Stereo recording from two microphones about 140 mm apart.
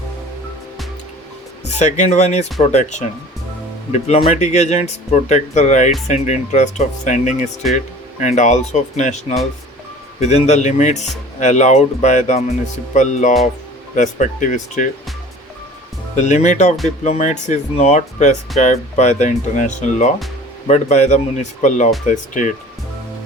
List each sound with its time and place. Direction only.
1.8 s speech: 55° left (ahead or behind)
4.0 s speech: 45° left (ahead or behind); by 14.8 s 65° left (ahead or behind)
16.2 s speech: 60° left (ahead or behind)